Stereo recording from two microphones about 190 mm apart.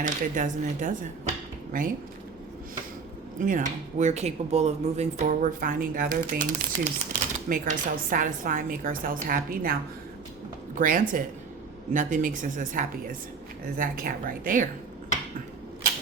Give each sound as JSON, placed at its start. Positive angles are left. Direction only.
{"t": 0.0, "sound": "speech", "side_deg": -40}
{"t": 3.4, "sound": "speech", "side_deg": -45}
{"t": 10.8, "sound": "speech", "side_deg": -45}